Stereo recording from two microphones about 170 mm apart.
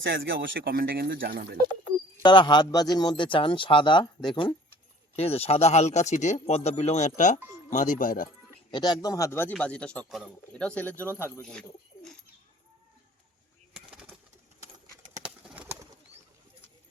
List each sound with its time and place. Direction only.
0.0 s speech: 90° right; by 1.5 s 60° right (ahead or behind)
2.2 s a man's voice: 25° left (ahead or behind); by 8.3 s 55° left (ahead or behind)
8.7 s speech: 25° left (ahead or behind)
15.2 s bird: 10° right (ahead or behind)